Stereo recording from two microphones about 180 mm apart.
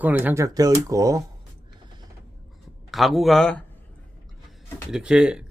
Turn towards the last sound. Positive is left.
turn(degrees=-5)  # may be behind; listen again after turning